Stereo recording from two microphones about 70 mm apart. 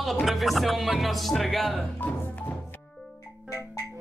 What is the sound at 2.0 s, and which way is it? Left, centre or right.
Speech, left.